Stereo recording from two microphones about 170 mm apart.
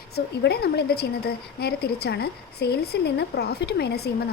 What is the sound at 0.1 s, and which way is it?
Speech, 70° left (ahead or behind).